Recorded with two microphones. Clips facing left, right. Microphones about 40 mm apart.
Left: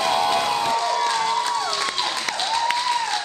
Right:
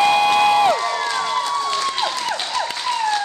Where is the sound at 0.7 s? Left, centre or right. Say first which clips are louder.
Right 1 dB; centre.